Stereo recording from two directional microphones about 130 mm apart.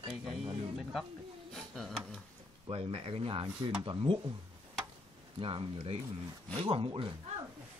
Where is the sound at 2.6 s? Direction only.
45° right (ahead or behind).